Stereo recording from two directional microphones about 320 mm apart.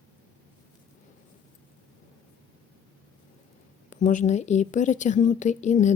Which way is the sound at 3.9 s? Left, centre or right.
Left.